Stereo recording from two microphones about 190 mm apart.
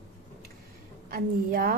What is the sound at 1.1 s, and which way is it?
Speech, 50° right (ahead or behind).